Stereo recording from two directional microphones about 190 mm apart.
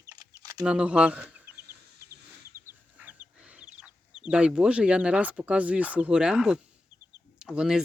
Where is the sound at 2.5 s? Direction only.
10° right (ahead or behind).